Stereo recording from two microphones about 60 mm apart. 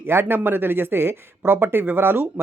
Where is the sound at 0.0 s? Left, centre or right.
Right.